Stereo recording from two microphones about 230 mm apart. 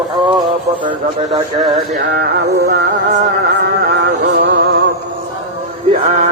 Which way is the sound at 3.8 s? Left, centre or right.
Right.